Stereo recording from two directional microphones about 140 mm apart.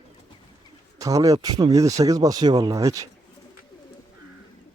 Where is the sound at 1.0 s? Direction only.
25° right (ahead or behind).